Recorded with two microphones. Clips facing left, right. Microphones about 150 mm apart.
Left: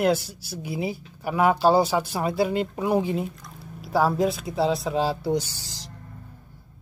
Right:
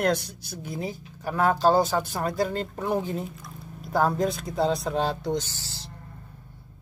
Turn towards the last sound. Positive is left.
turn(degrees=15)  # may be behind; listen again after turning